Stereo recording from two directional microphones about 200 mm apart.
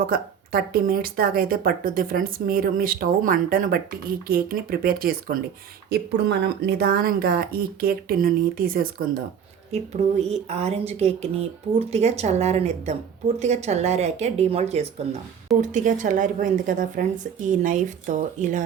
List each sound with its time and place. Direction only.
0.1 s speech: 45° right (ahead or behind)
9.7 s speech: 30° right (ahead or behind)